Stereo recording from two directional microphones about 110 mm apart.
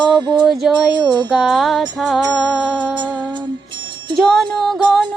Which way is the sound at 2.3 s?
5° right (ahead or behind).